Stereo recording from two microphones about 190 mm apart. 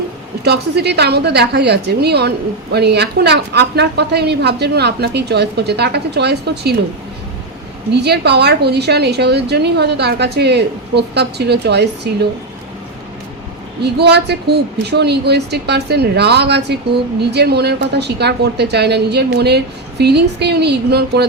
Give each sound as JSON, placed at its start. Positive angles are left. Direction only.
{"t": 0.4, "sound": "a woman's voice", "side_deg": -60}
{"t": 7.9, "sound": "a woman's voice", "side_deg": -60}
{"t": 13.8, "sound": "a woman's voice", "side_deg": -60}